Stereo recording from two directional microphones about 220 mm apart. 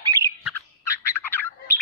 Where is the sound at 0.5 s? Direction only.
10° left (ahead or behind).